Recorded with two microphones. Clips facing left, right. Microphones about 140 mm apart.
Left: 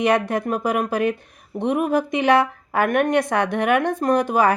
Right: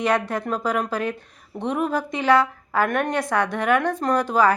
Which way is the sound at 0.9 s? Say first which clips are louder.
Left 5 dB; 15° left (ahead or behind).